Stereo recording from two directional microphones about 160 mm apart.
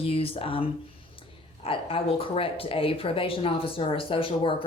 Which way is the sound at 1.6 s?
35° left (ahead or behind).